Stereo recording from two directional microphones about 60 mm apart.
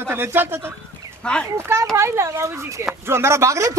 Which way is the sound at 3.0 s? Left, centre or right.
Right.